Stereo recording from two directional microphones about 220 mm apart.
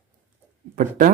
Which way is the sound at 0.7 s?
40° right (ahead or behind).